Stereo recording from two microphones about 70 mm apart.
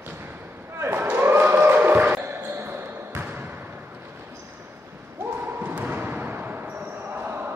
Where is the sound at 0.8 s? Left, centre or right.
Right.